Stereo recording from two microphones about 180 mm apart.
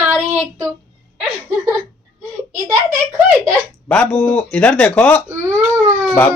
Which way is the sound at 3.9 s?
5° left (ahead or behind).